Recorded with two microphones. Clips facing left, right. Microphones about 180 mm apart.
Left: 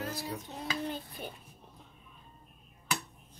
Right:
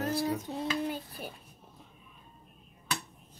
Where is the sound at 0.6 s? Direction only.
Centre (ahead or behind).